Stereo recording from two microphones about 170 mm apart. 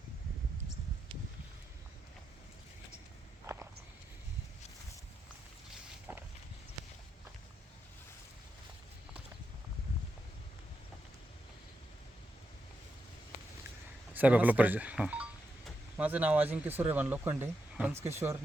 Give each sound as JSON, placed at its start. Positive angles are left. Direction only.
{"t": 3.4, "sound": "walk", "side_deg": -15}
{"t": 6.1, "sound": "a sound", "side_deg": -10}
{"t": 14.1, "sound": "speech", "side_deg": -10}